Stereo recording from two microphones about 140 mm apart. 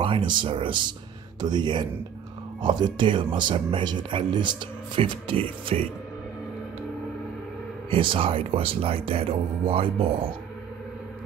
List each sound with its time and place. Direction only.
0.0 s speech: 35° right (ahead or behind)
7.9 s speech: 40° right (ahead or behind)